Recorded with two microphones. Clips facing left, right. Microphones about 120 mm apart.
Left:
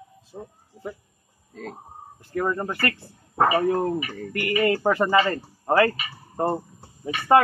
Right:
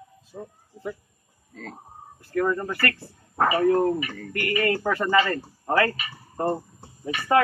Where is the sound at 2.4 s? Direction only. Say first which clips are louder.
Right 1 dB; 25° left (ahead or behind).